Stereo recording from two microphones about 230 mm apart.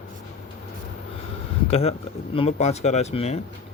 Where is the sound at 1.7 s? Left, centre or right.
Left.